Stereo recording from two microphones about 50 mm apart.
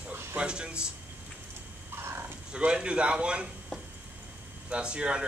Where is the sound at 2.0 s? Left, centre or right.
Right.